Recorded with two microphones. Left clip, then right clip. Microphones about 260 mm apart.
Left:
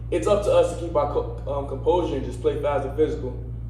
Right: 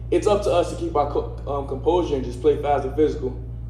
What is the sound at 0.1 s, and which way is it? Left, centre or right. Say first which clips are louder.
A man's voice: right 1 dB; right.